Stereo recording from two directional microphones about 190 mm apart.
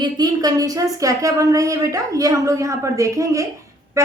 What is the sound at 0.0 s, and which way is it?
Speech, 20° right (ahead or behind).